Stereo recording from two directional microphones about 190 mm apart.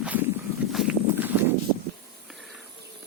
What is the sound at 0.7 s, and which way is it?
Walk, 5° right (ahead or behind).